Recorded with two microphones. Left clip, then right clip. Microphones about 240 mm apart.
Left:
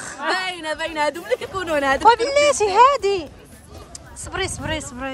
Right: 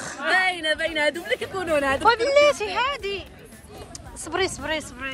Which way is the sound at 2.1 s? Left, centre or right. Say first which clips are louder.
Left 2 dB; centre.